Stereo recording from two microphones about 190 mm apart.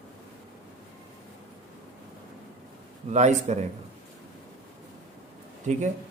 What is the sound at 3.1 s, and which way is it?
Speech, 35° right (ahead or behind).